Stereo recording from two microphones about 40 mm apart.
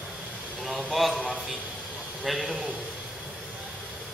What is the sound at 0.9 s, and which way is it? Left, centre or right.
Speech, centre.